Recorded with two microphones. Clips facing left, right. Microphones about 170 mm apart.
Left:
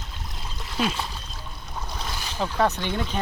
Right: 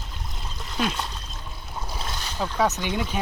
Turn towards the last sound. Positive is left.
turn(degrees=-10)  # may be behind; listen again after turning